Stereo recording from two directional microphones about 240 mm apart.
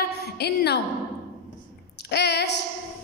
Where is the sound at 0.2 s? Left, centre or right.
Left.